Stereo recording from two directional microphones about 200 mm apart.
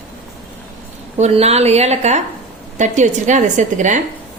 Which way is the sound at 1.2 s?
35° right (ahead or behind).